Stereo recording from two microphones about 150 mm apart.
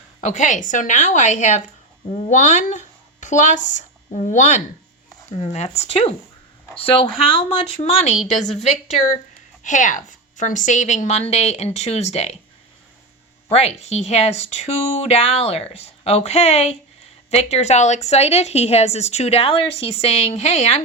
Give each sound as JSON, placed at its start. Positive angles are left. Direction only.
{"t": 0.3, "sound": "a woman's voice", "side_deg": 55}
{"t": 13.5, "sound": "a woman's voice", "side_deg": 45}